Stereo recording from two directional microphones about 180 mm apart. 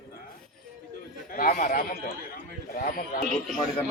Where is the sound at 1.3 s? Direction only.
55° left (ahead or behind).